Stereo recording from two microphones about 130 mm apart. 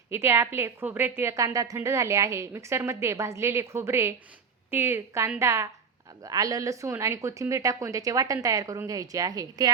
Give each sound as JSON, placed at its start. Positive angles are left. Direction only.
{"t": 0.1, "sound": "a woman's voice", "side_deg": -20}